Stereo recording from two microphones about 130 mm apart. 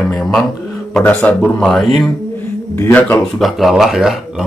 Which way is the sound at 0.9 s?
10° left (ahead or behind).